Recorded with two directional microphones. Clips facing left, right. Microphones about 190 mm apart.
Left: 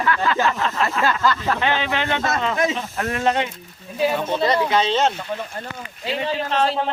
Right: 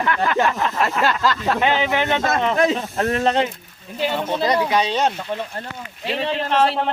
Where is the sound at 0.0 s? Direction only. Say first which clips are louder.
Right 1 dB; 20° right (ahead or behind).